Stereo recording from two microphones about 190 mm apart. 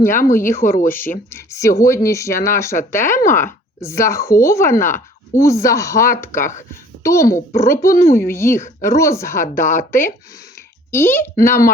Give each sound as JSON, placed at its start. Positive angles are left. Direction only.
{"t": 0.0, "sound": "speech", "side_deg": 45}
{"t": 0.3, "sound": "speech", "side_deg": 15}
{"t": 6.3, "sound": "speech", "side_deg": 40}
{"t": 7.0, "sound": "speech", "side_deg": 15}
{"t": 7.9, "sound": "speech", "side_deg": 45}
{"t": 8.2, "sound": "speech", "side_deg": 15}
{"t": 9.6, "sound": "speech", "side_deg": 45}
{"t": 10.9, "sound": "speech", "side_deg": 10}